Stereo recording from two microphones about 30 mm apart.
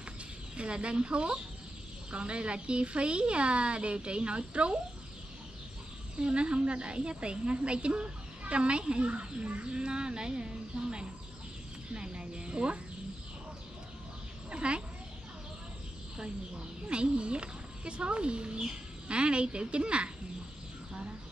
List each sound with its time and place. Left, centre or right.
0.6 s a woman's voice: right
6.1 s a woman's voice: right
14.5 s a sound: right
16.8 s a woman's voice: right